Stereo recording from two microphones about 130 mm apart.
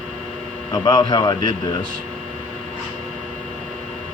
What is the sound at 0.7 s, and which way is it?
Speech, 30° left (ahead or behind).